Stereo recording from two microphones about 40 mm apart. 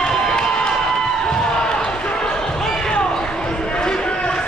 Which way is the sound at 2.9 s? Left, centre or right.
Left.